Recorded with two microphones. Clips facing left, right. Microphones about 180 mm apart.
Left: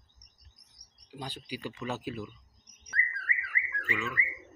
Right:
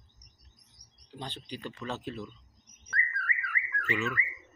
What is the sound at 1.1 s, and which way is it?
Speech, 5° left (ahead or behind).